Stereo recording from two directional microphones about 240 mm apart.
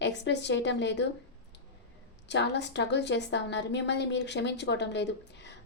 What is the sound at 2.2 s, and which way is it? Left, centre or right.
A woman's voice, left.